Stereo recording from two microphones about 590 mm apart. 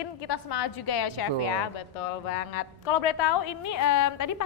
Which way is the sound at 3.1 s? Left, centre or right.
Left.